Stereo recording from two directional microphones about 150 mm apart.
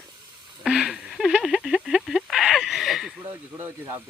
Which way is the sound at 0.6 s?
5° right (ahead or behind).